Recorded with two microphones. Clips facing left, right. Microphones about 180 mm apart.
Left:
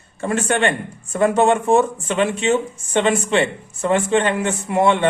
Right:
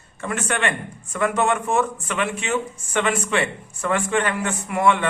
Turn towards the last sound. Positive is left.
turn(degrees=30)  # may be behind; listen again after turning